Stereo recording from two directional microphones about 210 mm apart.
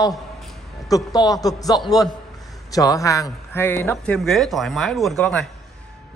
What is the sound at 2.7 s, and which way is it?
A man's voice, 15° left (ahead or behind).